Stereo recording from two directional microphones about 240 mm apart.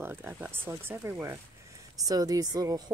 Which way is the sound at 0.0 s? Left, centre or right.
Centre.